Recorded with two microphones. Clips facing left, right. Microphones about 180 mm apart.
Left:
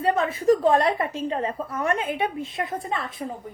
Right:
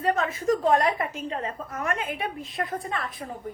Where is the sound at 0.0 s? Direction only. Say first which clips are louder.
Left 3 dB; 30° left (ahead or behind).